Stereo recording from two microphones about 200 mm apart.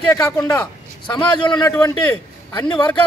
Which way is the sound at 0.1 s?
15° left (ahead or behind).